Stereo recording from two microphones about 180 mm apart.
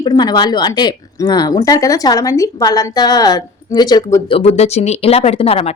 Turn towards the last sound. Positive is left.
turn(degrees=35)  # may be behind; listen again after turning